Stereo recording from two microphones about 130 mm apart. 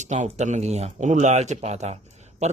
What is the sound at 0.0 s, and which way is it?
A man's voice, 65° right (ahead or behind).